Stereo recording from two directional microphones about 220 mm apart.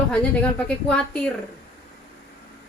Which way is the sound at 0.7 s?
5° left (ahead or behind).